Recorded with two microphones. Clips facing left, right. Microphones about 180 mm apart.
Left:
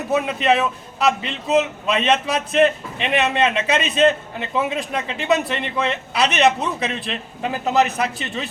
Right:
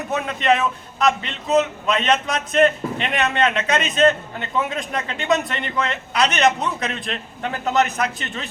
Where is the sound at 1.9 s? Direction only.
5° left (ahead or behind).